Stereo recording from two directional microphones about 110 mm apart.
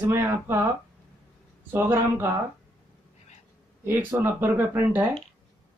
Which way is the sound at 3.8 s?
20° right (ahead or behind).